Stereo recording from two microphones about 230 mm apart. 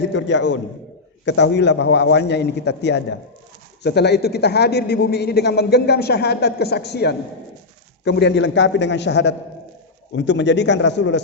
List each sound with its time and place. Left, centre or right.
0.1 s a man's voice: left